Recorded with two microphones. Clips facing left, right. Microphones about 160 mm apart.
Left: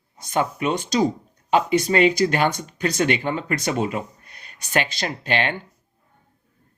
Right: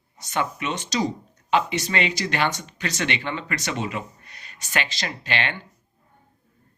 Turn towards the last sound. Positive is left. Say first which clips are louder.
# left 4 dB
turn(degrees=50)  # may be behind; listen again after turning